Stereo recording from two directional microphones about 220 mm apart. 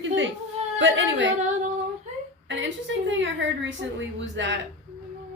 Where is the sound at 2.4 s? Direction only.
55° right (ahead or behind).